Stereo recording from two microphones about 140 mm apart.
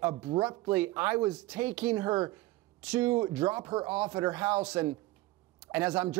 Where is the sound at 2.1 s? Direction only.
25° right (ahead or behind).